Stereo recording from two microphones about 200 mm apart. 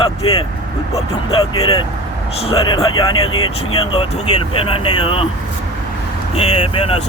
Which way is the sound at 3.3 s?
90° left.